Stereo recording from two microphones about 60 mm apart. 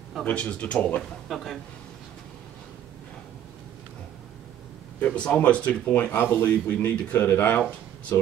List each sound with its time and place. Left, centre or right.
0.2 s speech: left
1.3 s a man's voice: centre
5.0 s a man's voice: left
8.1 s speech: left